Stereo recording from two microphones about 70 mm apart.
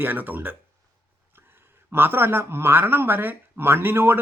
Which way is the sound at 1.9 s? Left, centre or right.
Right.